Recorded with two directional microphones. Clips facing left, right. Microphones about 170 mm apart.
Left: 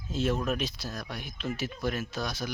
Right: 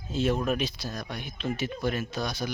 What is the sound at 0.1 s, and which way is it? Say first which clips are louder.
Speech: right 2 dB; centre (ahead or behind).